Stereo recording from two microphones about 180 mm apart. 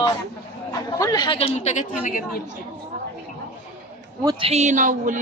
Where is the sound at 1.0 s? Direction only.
20° left (ahead or behind); by 1.8 s 40° left (ahead or behind).